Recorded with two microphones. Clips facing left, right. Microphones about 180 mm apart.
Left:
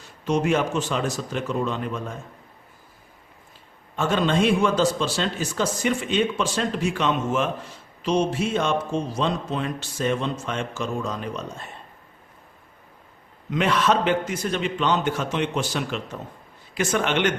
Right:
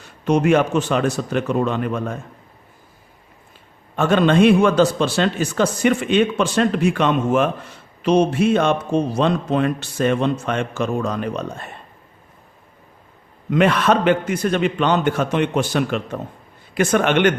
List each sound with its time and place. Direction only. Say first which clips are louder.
0.3 s speech: right 6 dB; 60° right (ahead or behind)
3.9 s speech: right 6 dB; 60° right (ahead or behind)
13.5 s speech: right 5 dB; 55° right (ahead or behind)